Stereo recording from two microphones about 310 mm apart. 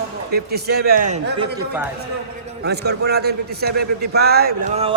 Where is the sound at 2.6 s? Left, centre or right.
Right.